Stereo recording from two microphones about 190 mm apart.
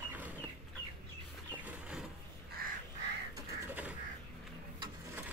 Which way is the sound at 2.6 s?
50° right (ahead or behind).